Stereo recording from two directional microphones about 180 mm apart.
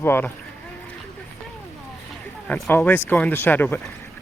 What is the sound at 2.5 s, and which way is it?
Speech, 10° left (ahead or behind).